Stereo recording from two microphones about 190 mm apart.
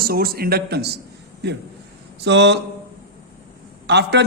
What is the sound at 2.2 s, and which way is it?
Speech, 65° right (ahead or behind).